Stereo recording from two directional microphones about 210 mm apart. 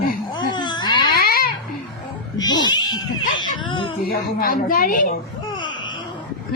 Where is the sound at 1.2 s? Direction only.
45° left (ahead or behind).